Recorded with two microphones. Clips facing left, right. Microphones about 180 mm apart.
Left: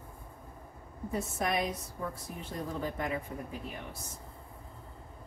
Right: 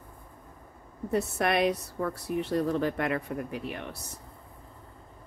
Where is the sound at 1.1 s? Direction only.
70° right (ahead or behind).